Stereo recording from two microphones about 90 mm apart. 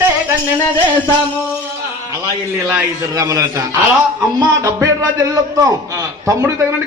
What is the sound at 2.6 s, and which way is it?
Speech, 30° right (ahead or behind).